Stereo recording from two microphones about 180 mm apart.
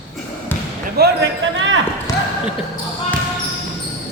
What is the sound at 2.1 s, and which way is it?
Basketball bounce, 20° left (ahead or behind).